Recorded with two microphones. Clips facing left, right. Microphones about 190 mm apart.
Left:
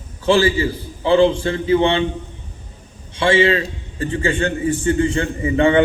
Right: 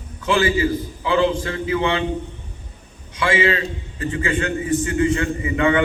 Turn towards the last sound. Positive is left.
turn(degrees=30)  # may be behind; listen again after turning